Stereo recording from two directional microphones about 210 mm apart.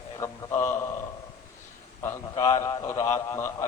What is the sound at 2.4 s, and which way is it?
A man's voice, 20° left (ahead or behind).